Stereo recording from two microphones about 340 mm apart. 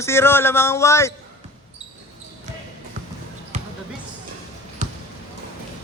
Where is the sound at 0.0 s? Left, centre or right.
Centre.